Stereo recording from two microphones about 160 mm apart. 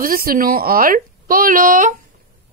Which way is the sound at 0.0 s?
65° right (ahead or behind).